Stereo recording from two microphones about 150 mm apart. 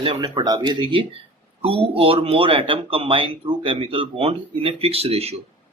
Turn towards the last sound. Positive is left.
turn(degrees=-40)  # may be behind; listen again after turning